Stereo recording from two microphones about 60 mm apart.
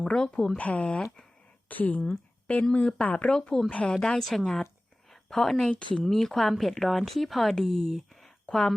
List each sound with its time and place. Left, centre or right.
0.0 s a woman's voice: centre
3.3 s a woman's voice: centre
4.0 s a woman's voice: centre